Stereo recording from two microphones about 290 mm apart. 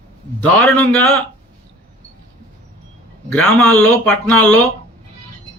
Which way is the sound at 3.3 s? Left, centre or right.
Centre.